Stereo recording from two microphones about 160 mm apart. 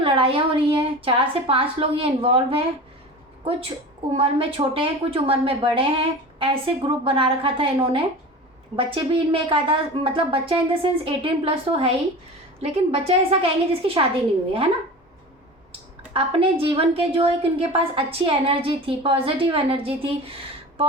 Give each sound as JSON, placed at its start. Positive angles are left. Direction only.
{"t": 0.0, "sound": "a woman's voice", "side_deg": -35}
{"t": 16.1, "sound": "a woman's voice", "side_deg": -35}